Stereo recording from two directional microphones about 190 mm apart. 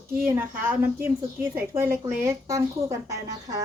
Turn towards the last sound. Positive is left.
turn(degrees=-20)  # may be behind; listen again after turning